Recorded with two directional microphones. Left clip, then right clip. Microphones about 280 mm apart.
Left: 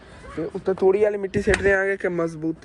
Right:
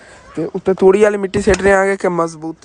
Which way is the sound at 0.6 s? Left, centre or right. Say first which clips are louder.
Right 8 dB; right.